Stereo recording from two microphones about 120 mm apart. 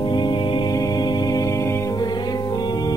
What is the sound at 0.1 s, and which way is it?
Music, 40° left (ahead or behind).